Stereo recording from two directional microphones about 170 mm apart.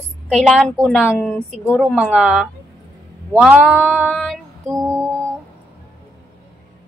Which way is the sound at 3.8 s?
5° left (ahead or behind).